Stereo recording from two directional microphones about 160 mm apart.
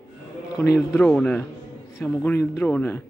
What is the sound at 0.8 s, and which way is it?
A man's voice, 5° left (ahead or behind).